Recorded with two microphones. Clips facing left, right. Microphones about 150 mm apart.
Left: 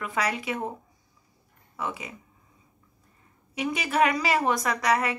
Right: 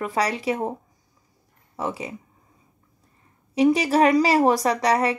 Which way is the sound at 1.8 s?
35° right (ahead or behind).